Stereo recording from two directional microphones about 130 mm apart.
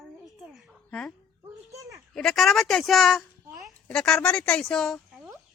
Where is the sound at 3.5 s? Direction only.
Centre (ahead or behind).